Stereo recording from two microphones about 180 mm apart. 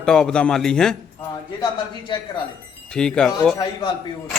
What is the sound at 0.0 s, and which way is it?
Speech, 5° left (ahead or behind).